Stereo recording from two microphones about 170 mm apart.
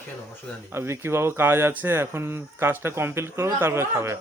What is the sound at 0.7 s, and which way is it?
Speech, 15° right (ahead or behind).